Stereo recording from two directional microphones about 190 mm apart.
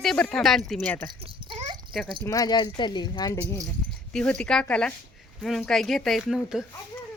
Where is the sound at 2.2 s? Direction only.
20° left (ahead or behind).